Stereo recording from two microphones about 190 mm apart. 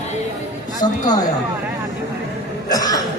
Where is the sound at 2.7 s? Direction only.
20° left (ahead or behind).